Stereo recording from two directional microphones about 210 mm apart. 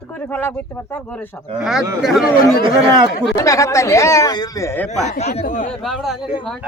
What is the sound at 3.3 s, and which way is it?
Speech, 15° left (ahead or behind).